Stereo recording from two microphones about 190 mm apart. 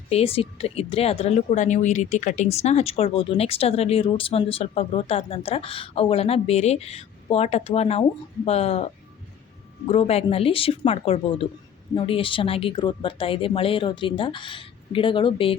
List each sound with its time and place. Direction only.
0.1 s speech: 30° left (ahead or behind)
9.9 s speech: 30° left (ahead or behind)